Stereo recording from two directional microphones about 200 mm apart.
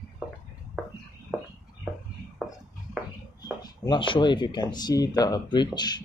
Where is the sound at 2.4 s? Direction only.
Centre (ahead or behind).